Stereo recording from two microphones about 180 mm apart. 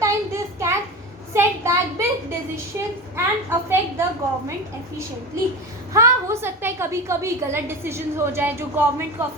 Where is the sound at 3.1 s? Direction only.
15° right (ahead or behind).